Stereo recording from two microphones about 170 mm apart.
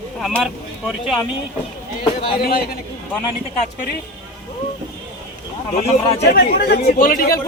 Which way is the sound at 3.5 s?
50° left (ahead or behind).